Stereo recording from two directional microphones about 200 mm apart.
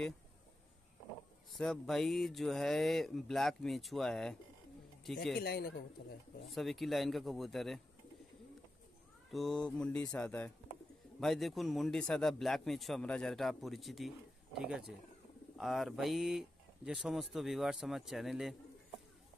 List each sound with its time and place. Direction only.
1.5 s speech: centre (ahead or behind)
5.4 s a man's voice: 55° left (ahead or behind)
6.5 s speech: centre (ahead or behind)
9.3 s speech: centre (ahead or behind)